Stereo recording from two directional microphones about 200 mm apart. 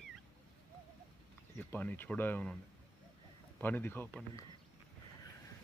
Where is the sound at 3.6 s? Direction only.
10° left (ahead or behind).